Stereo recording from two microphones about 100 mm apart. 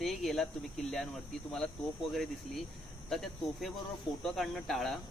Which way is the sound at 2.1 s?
5° left (ahead or behind).